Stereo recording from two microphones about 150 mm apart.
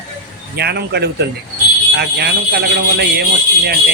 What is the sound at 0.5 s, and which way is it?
A man's voice, 90° right.